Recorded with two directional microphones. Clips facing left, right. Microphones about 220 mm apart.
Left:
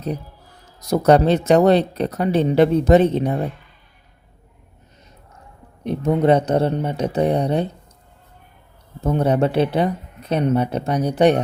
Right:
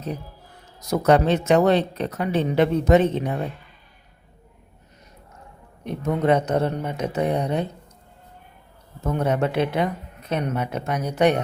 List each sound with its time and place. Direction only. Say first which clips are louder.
0.8 s speech: left 4 dB; 35° left (ahead or behind)
5.8 s speech: left 5 dB; 30° left (ahead or behind)
9.0 s speech: left 4 dB; 35° left (ahead or behind)